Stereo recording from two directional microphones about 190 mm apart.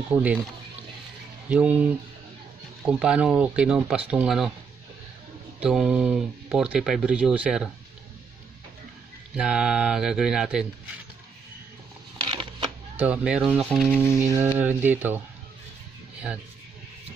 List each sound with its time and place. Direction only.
0.1 s speech: 5° right (ahead or behind)
1.5 s speech: 5° right (ahead or behind)
5.6 s speech: 5° right (ahead or behind)
9.3 s speech: 5° right (ahead or behind)
12.3 s cash register: 25° right (ahead or behind)
13.0 s speech: 5° right (ahead or behind)